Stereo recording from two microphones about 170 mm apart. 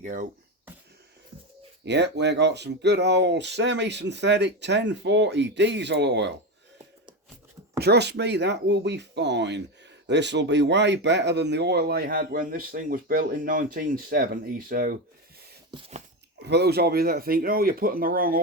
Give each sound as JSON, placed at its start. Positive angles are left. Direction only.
{"t": 0.0, "sound": "speech", "side_deg": -50}
{"t": 1.8, "sound": "speech", "side_deg": -90}
{"t": 7.8, "sound": "speech", "side_deg": -75}
{"t": 15.7, "sound": "a sound", "side_deg": -25}
{"t": 16.4, "sound": "speech", "side_deg": -80}